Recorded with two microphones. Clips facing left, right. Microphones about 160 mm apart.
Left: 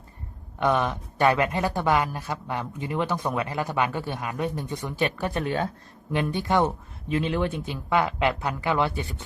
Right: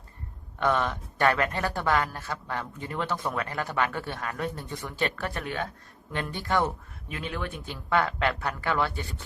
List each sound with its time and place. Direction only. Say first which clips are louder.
0.6 s speech: left 3 dB; 15° left (ahead or behind)
5.5 s speech: left 6 dB; 35° left (ahead or behind)
6.1 s speech: left 4 dB; 15° left (ahead or behind)
7.6 s speech: left 2 dB; 15° left (ahead or behind)